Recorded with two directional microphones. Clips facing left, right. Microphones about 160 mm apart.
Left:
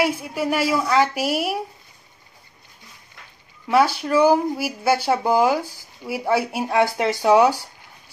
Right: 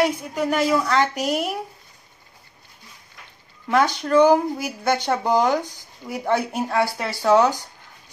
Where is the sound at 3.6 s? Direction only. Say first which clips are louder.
Left 2 dB; 5° left (ahead or behind).